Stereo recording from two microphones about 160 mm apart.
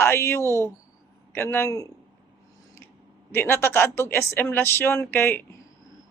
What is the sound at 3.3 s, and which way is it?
Speech, 15° left (ahead or behind).